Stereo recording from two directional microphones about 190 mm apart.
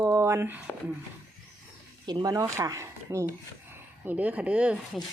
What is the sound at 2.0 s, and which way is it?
Speech, 20° right (ahead or behind).